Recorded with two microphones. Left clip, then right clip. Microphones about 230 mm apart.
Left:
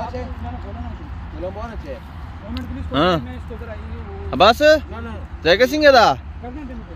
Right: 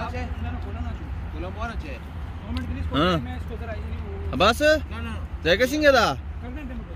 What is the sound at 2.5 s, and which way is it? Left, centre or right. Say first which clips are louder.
Speech: left 5 dB; centre.